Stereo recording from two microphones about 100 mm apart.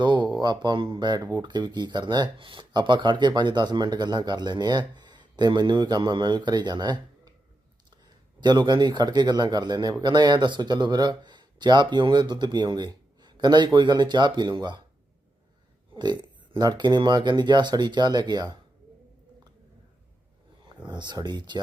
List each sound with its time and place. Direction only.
0.0 s speech: 45° right (ahead or behind)
8.4 s speech: 45° right (ahead or behind)
16.0 s speech: 45° right (ahead or behind)
20.8 s speech: 50° right (ahead or behind)